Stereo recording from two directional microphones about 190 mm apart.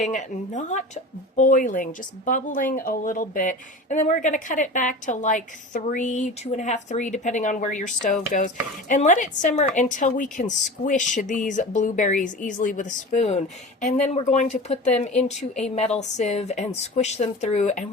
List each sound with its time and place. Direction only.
0.0 s speech: 40° left (ahead or behind)